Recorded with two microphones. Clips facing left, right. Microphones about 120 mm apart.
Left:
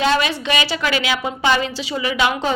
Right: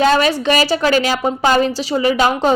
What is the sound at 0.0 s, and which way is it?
A woman's voice, 45° right (ahead or behind).